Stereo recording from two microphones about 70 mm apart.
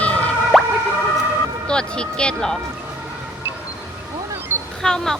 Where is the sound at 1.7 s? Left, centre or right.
Centre.